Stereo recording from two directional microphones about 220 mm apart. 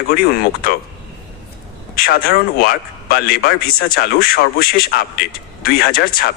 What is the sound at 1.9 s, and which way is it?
A man's voice, 40° left (ahead or behind).